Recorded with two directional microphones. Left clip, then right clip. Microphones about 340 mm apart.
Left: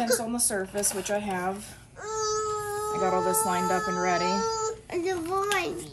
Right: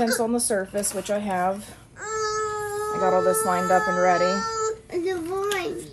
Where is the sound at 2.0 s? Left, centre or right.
Centre.